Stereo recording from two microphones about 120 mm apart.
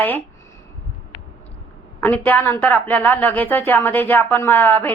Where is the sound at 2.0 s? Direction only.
15° left (ahead or behind).